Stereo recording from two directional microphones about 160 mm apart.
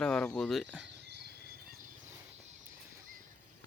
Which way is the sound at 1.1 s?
90° right.